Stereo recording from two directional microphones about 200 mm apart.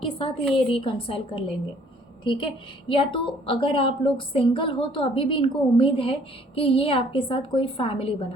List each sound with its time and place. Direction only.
0.0 s a woman's voice: 25° left (ahead or behind)